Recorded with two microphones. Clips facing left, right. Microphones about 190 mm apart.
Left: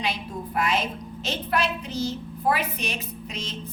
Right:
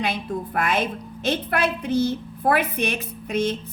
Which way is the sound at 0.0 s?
55° right (ahead or behind).